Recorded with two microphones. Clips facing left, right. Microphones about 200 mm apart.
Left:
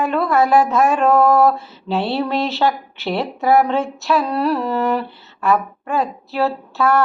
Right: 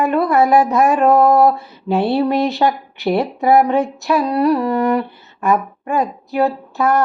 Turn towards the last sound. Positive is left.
turn(degrees=-15)  # may be behind; listen again after turning